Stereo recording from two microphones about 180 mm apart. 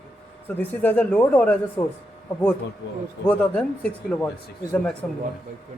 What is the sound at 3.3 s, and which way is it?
Speech, 10° left (ahead or behind).